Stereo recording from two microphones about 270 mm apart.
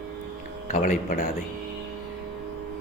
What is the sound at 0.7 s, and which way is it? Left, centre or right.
Speech, left.